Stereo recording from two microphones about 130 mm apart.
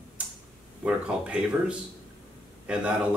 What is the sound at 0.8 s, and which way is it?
A man's voice, 10° right (ahead or behind).